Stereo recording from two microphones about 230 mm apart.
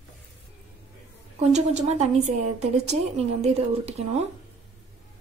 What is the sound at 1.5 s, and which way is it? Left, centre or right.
A woman's voice, right.